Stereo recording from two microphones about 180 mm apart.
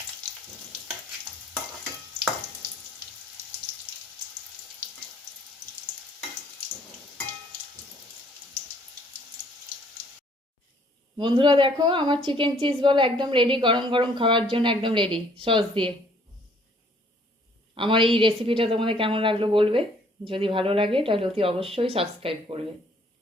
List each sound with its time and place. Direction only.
11.2 s a woman's voice: 25° right (ahead or behind)
17.7 s a woman's voice: 30° right (ahead or behind)